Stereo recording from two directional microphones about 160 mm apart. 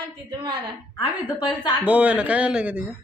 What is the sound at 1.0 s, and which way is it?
Speech, 25° left (ahead or behind).